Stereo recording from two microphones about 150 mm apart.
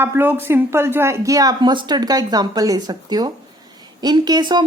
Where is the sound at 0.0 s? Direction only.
15° right (ahead or behind).